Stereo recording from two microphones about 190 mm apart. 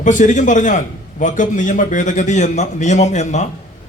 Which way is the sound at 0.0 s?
40° left (ahead or behind).